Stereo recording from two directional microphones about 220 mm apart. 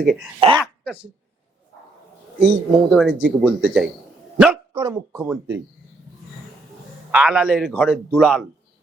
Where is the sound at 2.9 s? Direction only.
Centre (ahead or behind).